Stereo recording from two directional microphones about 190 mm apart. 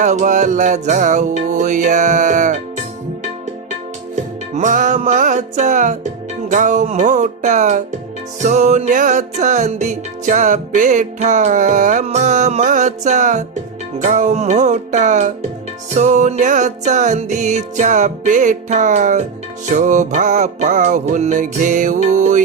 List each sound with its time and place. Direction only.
0.0 s music: 40° right (ahead or behind)
4.1 s music: 40° right (ahead or behind)